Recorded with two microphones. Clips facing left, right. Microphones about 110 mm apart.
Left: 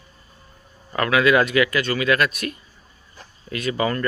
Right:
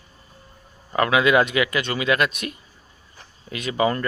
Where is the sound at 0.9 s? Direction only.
20° right (ahead or behind).